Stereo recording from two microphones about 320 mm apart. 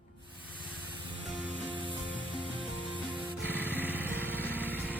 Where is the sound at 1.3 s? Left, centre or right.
Centre.